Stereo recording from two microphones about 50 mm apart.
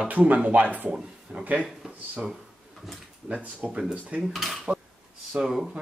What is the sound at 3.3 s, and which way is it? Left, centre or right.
Speech, right.